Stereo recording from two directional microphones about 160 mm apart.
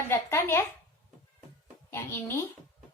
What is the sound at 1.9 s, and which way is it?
Speech, 15° left (ahead or behind).